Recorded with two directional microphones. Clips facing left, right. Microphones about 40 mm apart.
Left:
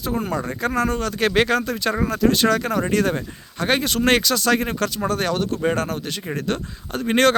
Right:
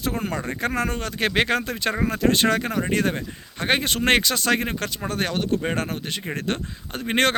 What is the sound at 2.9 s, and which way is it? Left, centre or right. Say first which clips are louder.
Speech: left 3 dB; right.